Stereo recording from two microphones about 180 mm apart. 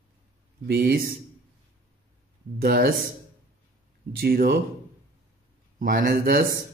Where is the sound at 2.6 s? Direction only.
60° right (ahead or behind).